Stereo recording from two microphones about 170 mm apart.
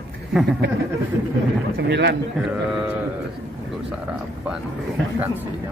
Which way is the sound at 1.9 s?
90° right.